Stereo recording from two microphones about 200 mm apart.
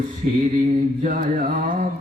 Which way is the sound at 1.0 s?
40° right (ahead or behind).